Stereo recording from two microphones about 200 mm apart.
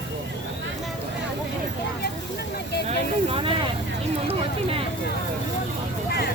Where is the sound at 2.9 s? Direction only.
30° right (ahead or behind).